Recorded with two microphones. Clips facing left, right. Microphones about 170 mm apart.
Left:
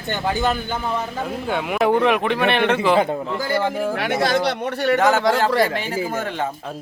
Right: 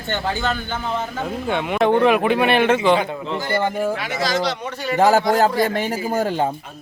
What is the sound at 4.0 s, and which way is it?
Speech, 60° left (ahead or behind).